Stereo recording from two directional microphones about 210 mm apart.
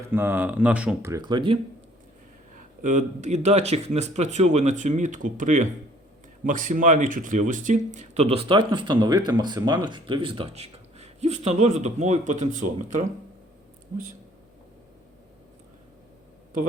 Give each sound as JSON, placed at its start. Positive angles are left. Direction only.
{"t": 0.1, "sound": "speech", "side_deg": -10}
{"t": 2.8, "sound": "speech", "side_deg": -35}